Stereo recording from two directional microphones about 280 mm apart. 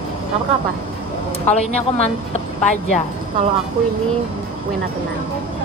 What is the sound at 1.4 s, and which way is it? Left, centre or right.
Speech, left.